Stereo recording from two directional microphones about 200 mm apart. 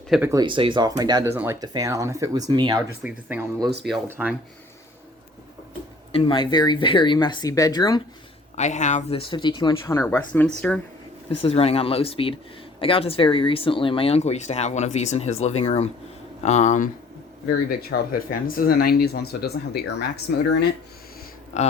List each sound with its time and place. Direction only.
0.1 s speech: 15° right (ahead or behind)
3.0 s speech: 10° right (ahead or behind)
6.1 s speech: 25° left (ahead or behind)
8.5 s speech: 35° left (ahead or behind); by 10.8 s 5° left (ahead or behind)
11.4 s speech: 30° left (ahead or behind); by 20.1 s 55° left (ahead or behind)
21.5 s speech: 35° left (ahead or behind)